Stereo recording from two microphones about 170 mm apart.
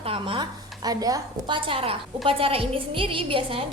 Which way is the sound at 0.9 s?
20° right (ahead or behind).